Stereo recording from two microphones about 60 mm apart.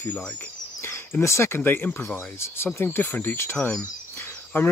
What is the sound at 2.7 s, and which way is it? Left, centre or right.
Speech, left.